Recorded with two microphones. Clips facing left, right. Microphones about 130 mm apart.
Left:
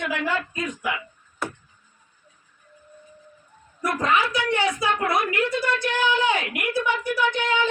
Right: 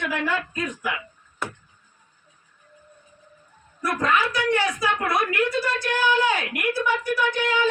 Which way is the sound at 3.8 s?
20° left (ahead or behind).